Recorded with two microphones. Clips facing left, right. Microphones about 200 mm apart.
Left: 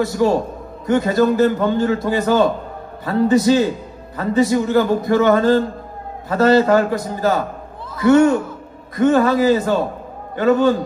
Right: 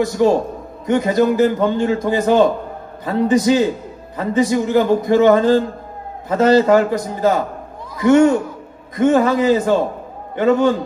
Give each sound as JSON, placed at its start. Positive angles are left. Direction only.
{"t": 0.0, "sound": "a man's voice", "side_deg": -20}